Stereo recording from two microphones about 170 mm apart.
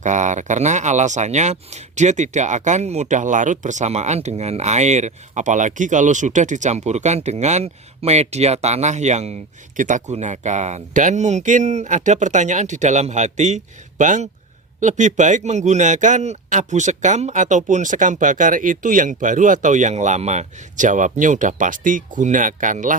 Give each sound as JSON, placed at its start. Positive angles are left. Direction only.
{"t": 0.0, "sound": "speech", "side_deg": -45}